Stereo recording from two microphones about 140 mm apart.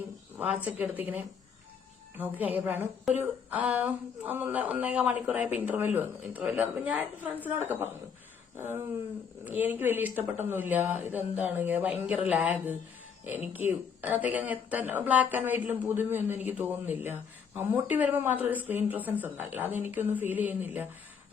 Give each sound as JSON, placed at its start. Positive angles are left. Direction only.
{"t": 0.3, "sound": "speech", "side_deg": -10}